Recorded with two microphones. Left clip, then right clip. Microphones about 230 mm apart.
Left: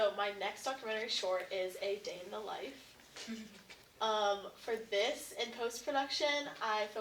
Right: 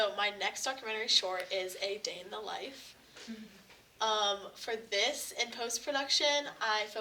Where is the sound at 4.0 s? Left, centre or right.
Right.